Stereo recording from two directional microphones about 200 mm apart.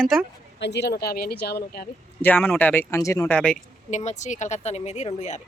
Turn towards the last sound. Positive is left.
turn(degrees=35)  # may be behind; listen again after turning